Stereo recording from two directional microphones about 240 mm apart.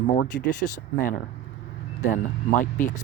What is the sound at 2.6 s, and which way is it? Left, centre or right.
Speech, left.